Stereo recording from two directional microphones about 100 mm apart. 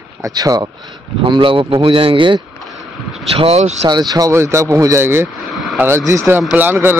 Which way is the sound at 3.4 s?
90° right.